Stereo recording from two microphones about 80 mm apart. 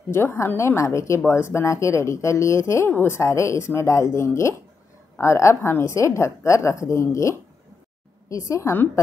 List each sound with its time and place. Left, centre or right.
0.1 s a woman's voice: left